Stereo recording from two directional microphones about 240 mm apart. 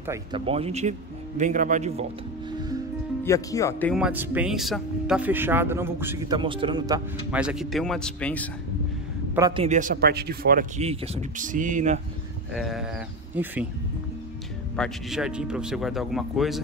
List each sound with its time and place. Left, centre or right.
0.0 s speech: centre
0.5 s speech: right
3.3 s speech: centre
3.9 s speech: centre
7.2 s speech: centre
9.6 s speech: right
12.5 s speech: centre
14.8 s speech: centre